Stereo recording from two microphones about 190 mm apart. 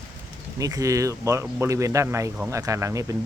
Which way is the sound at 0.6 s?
20° right (ahead or behind).